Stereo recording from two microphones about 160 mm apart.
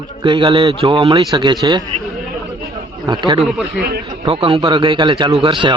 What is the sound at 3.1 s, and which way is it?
A man's voice, 30° right (ahead or behind).